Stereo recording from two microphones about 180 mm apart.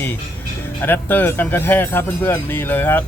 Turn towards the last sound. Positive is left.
turn(degrees=10)  # may be behind; listen again after turning